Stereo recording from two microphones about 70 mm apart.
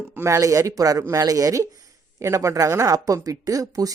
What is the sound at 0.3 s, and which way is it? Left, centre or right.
Speech, right.